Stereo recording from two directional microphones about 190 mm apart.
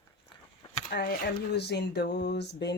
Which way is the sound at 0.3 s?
25° left (ahead or behind).